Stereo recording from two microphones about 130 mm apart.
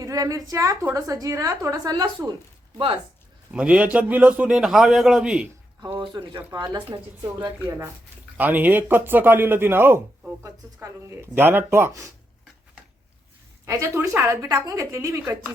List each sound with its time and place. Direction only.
0.0 s speech: 25° right (ahead or behind); by 3.0 s 40° right (ahead or behind)
3.5 s a man's voice: 10° right (ahead or behind)
5.8 s speech: 35° right (ahead or behind)
8.4 s a man's voice: 15° right (ahead or behind)
13.7 s speech: 20° right (ahead or behind)